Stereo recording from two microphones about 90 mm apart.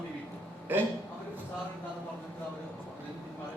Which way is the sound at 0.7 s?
20° right (ahead or behind).